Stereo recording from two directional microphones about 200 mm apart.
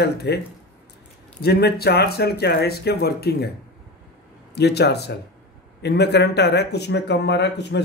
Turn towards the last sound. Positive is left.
turn(degrees=60)  # may be behind; listen again after turning